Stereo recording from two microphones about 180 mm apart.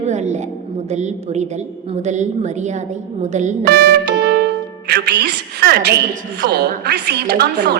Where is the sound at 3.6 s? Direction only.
60° right (ahead or behind).